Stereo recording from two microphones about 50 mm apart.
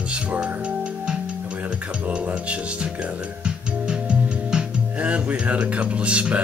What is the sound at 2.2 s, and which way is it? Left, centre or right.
Speech, right.